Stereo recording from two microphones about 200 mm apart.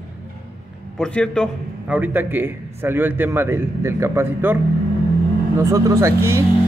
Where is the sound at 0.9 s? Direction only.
5° left (ahead or behind).